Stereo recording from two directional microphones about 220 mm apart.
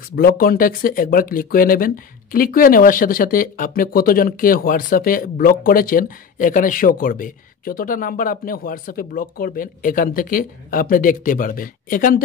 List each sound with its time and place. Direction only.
0.1 s speech: 40° left (ahead or behind)